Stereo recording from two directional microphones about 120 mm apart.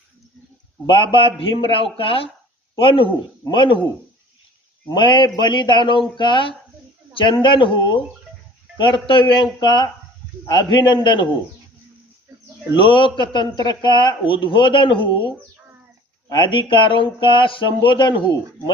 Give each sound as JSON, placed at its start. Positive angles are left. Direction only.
{"t": 0.9, "sound": "a man's voice", "side_deg": 45}
{"t": 4.9, "sound": "a man's voice", "side_deg": 40}
{"t": 12.7, "sound": "a man's voice", "side_deg": 45}
{"t": 16.3, "sound": "a man's voice", "side_deg": 40}